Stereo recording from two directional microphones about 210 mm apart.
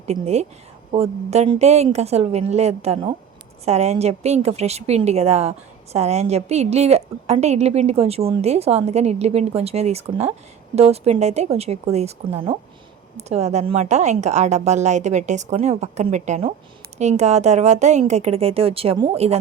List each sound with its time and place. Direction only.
0.0 s a woman's voice: 30° right (ahead or behind)